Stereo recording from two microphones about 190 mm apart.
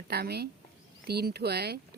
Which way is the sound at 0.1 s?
55° right (ahead or behind).